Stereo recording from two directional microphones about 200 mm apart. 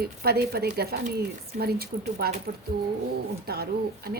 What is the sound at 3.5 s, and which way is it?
Speech, 50° right (ahead or behind).